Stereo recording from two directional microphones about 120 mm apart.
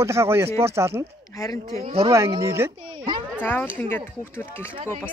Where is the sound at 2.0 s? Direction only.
25° right (ahead or behind).